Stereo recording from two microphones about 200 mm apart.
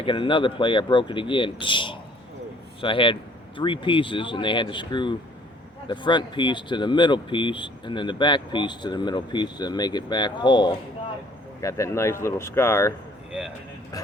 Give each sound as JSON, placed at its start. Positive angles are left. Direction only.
{"t": 0.0, "sound": "speech", "side_deg": 25}